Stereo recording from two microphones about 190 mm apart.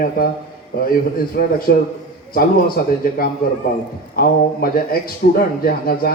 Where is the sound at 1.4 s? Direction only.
55° left (ahead or behind).